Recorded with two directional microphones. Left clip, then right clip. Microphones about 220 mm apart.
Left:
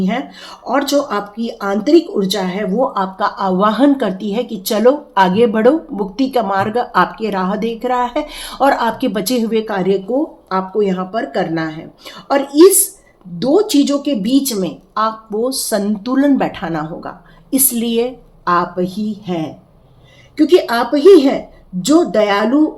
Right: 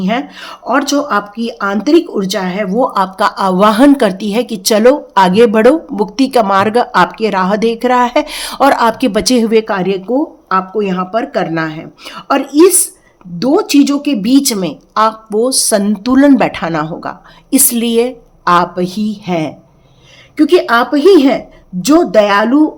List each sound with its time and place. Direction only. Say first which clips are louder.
0.0 s speech: right 4 dB; 30° right (ahead or behind)